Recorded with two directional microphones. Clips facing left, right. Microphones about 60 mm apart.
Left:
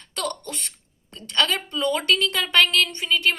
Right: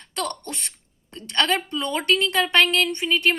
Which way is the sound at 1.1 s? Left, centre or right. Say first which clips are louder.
Right 1 dB; right.